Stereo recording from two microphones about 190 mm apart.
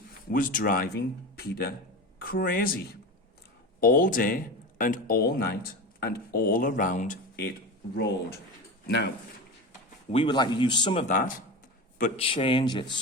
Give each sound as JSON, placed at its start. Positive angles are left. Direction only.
{"t": 0.3, "sound": "speech", "side_deg": 45}
{"t": 7.9, "sound": "speech", "side_deg": 60}
{"t": 10.1, "sound": "speech", "side_deg": 25}
{"t": 11.1, "sound": "speech", "side_deg": 45}
{"t": 12.1, "sound": "speech", "side_deg": 30}